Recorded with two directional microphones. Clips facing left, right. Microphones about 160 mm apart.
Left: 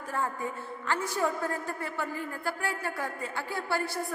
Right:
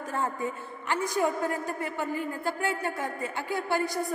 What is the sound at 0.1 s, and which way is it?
A woman's voice, 20° right (ahead or behind).